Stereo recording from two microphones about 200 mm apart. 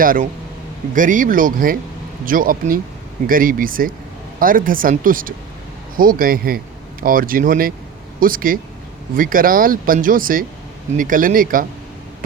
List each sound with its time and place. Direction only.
0.0 s speech: 45° right (ahead or behind)